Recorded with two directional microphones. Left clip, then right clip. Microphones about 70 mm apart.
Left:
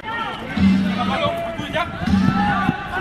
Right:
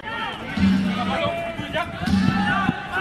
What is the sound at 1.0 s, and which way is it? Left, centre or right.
Run, left.